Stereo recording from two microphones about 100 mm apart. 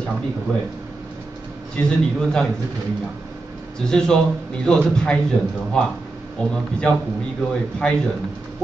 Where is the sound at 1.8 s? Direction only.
20° left (ahead or behind).